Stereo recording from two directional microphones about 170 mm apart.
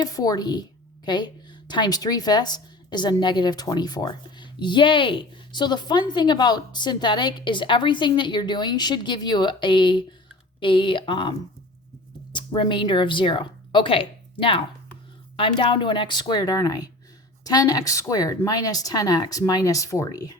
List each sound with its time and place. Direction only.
0.0 s a woman's voice: 20° left (ahead or behind)